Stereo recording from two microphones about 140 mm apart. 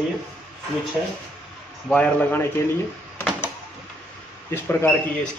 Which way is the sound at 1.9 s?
10° left (ahead or behind).